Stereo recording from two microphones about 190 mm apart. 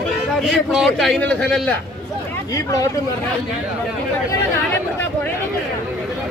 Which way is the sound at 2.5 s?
15° left (ahead or behind).